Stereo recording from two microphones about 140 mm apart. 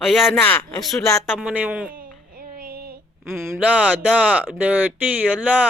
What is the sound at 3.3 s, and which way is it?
Speech, 15° right (ahead or behind).